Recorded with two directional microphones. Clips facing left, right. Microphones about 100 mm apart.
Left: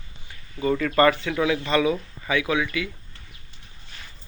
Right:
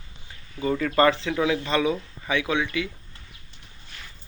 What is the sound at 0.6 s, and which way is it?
Speech, 10° right (ahead or behind).